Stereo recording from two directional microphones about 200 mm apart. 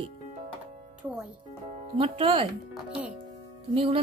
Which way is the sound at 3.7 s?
25° right (ahead or behind).